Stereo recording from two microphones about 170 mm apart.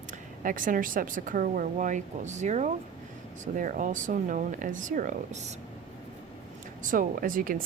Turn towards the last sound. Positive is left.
turn(degrees=-55)  # may be behind; listen again after turning